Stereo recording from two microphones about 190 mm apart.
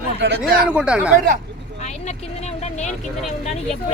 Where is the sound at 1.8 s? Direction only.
35° left (ahead or behind).